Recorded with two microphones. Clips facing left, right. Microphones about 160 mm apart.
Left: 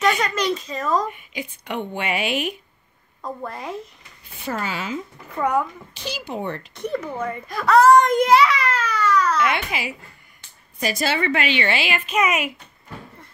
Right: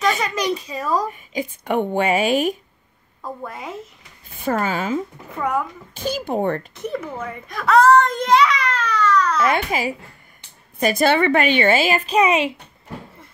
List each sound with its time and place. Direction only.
0.2 s a child's voice: 15° right (ahead or behind)
1.1 s a woman's voice: 40° right (ahead or behind)
3.2 s speech: centre (ahead or behind)
4.4 s a woman's voice: 50° right (ahead or behind)
5.4 s speech: centre (ahead or behind)
5.9 s a woman's voice: 50° right (ahead or behind)
6.7 s speech: 5° right (ahead or behind)
7.9 s baby cry: 15° left (ahead or behind)
9.4 s a child's voice: 40° right (ahead or behind)
10.8 s a woman's voice: 55° right (ahead or behind); by 12.5 s 30° right (ahead or behind)